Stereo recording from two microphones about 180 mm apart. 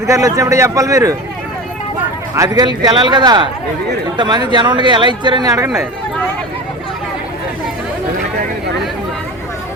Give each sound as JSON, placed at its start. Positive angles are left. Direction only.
{"t": 0.0, "sound": "a man's voice", "side_deg": -15}
{"t": 2.3, "sound": "speech", "side_deg": -20}